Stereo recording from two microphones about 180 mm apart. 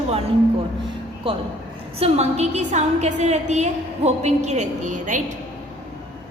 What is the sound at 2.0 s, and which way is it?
A woman's voice, 35° right (ahead or behind).